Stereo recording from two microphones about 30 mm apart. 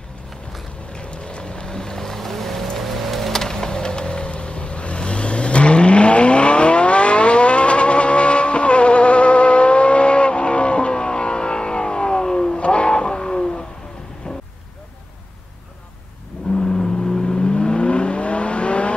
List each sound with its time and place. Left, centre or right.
0.9 s vehicle: left; by 2.7 s centre
2.8 s music: centre
3.4 s vehicle: left
12.5 s music: left
16.5 s vehicle: left